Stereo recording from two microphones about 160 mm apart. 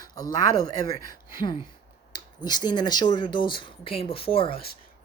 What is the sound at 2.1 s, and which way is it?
A woman's voice, 25° left (ahead or behind).